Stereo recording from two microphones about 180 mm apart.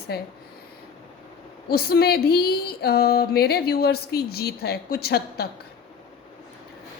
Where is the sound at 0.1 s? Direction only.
60° left (ahead or behind).